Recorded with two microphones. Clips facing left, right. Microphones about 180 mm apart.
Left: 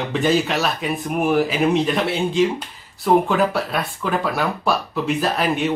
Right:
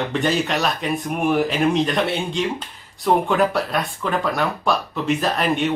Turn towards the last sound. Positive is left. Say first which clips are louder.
# even
turn(degrees=5)  # may be behind; listen again after turning